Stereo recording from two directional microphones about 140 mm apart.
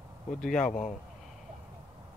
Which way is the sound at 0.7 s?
60° left (ahead or behind).